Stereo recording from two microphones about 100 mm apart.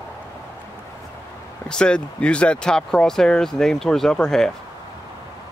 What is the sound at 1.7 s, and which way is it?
Speech, 10° left (ahead or behind).